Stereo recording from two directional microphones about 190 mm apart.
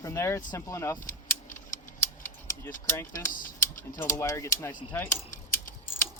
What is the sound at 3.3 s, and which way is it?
Typing, 45° left (ahead or behind).